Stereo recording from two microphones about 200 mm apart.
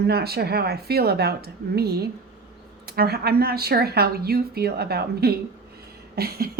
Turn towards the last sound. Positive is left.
turn(degrees=-50)  # may be behind; listen again after turning